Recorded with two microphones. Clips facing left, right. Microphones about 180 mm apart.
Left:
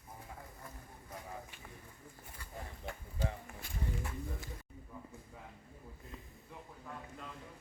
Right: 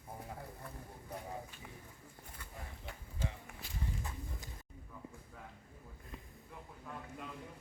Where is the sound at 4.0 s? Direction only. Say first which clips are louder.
Left 4 dB; 20° right (ahead or behind).